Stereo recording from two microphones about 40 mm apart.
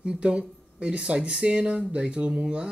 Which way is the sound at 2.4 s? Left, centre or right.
Right.